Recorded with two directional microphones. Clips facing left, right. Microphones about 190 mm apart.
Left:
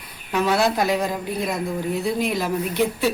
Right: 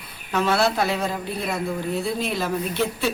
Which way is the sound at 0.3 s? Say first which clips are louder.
Left 1 dB; 15° left (ahead or behind).